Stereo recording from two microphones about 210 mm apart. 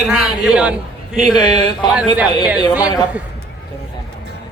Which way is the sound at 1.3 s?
20° left (ahead or behind).